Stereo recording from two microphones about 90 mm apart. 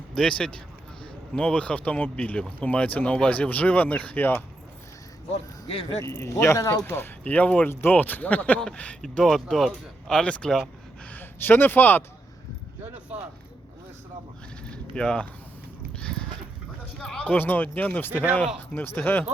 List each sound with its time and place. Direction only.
0.1 s speech: 10° left (ahead or behind)
6.0 s speech: 30° left (ahead or behind); by 10.6 s 10° left (ahead or behind)
11.1 s speech: 20° left (ahead or behind)
12.8 s zipper: 15° right (ahead or behind)
14.6 s a sound: 10° left (ahead or behind)
15.9 s horse: 10° left (ahead or behind)
17.0 s speech: 10° left (ahead or behind)
17.3 s speech: 20° left (ahead or behind)